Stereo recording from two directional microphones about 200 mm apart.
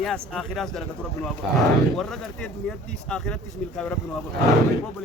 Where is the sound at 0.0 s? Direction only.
Centre (ahead or behind).